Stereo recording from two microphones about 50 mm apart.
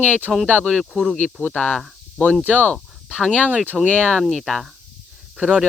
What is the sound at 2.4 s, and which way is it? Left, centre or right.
Speech, right.